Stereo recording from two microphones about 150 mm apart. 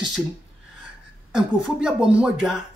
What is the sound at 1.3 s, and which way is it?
Speech, 5° right (ahead or behind).